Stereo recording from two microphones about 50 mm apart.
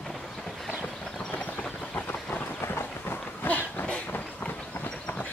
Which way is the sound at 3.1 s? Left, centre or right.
Left.